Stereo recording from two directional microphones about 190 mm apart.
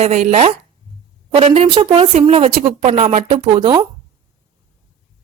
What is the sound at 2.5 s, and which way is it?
A woman's voice, 45° right (ahead or behind).